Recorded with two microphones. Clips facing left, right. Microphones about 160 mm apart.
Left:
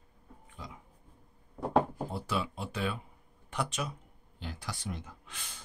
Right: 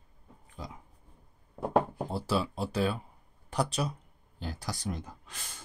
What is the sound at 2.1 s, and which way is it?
Speech, 35° right (ahead or behind).